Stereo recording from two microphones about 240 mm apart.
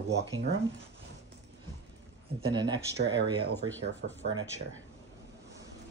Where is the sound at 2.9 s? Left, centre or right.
Right.